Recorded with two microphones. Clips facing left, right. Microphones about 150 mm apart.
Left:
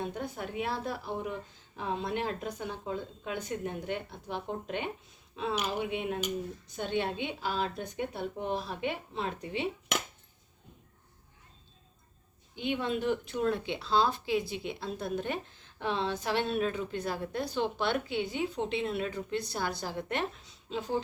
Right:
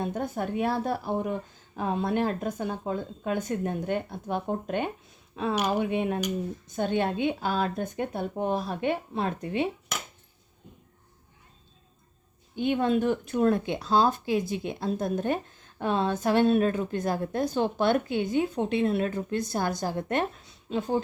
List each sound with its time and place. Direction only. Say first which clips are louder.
0.0 s speech: right 6 dB; 50° right (ahead or behind)
12.5 s speech: right 7 dB; 50° right (ahead or behind)